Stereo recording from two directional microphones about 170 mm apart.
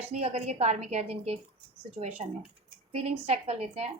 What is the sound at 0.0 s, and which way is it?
A woman's voice, 35° right (ahead or behind).